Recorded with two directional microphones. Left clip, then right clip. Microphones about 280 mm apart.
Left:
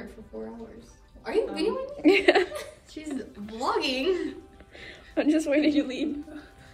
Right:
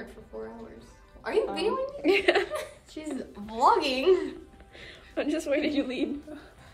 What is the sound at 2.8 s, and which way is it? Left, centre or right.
Speech, right.